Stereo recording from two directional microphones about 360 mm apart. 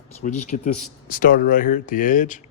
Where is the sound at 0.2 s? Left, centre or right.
Centre.